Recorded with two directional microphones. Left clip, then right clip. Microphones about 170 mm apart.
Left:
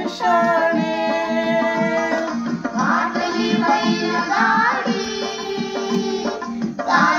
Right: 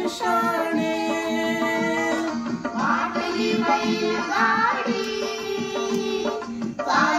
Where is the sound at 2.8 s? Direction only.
30° left (ahead or behind).